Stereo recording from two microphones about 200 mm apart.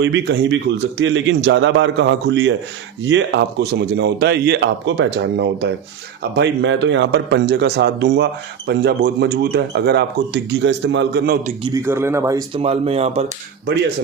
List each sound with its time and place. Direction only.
0.0 s a man's voice: 60° right (ahead or behind)
11.6 s speech: 15° right (ahead or behind)
12.6 s speech: 30° right (ahead or behind)